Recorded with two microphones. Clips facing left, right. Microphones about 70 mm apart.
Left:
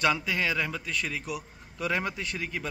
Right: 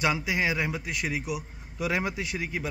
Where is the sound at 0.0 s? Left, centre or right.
Centre.